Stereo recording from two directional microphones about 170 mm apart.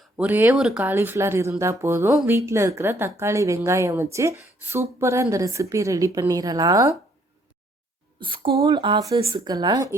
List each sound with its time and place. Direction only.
0.2 s a woman's voice: 10° right (ahead or behind)
8.2 s a woman's voice: 30° right (ahead or behind)